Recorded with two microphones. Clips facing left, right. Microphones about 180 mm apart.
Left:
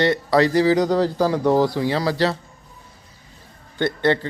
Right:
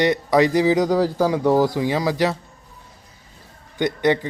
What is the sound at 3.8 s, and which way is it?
Speech, 15° right (ahead or behind).